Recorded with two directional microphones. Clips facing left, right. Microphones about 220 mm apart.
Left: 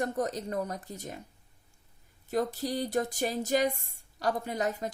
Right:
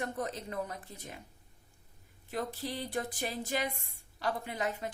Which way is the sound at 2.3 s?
40° left (ahead or behind).